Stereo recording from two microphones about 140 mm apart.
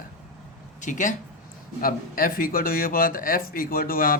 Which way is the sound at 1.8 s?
90° left.